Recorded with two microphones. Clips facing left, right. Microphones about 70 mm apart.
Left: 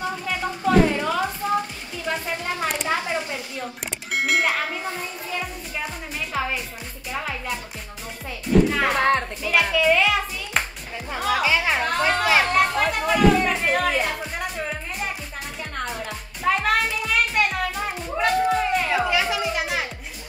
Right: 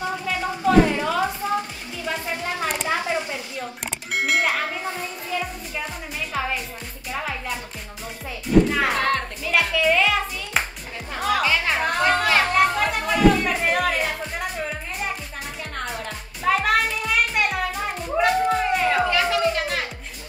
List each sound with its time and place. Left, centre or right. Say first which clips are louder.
0.3 s music: even; centre
2.6 s a sound: even; centre
6.3 s music: even; centre
8.9 s music: left 2 dB; centre
9.4 s music: left 1 dB; centre
12.0 s children playing: right 1 dB; centre
12.4 s music: right 1 dB; centre
16.4 s music: right 1 dB; centre